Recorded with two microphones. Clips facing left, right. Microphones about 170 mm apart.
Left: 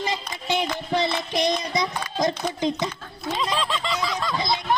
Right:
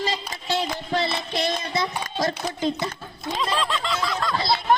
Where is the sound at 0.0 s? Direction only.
15° left (ahead or behind).